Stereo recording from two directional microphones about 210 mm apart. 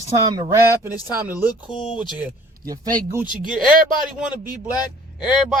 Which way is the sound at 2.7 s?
15° right (ahead or behind).